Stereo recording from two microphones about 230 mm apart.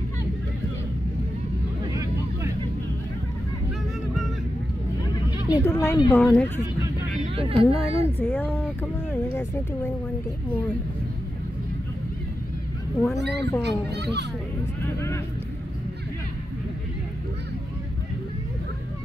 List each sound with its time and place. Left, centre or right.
5.5 s speech: centre
7.3 s speech: right
8.2 s speech: centre
13.2 s a child's voice: right